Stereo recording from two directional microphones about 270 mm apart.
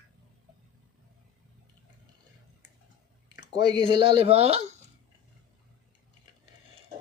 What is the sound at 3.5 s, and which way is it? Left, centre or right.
Speech, centre.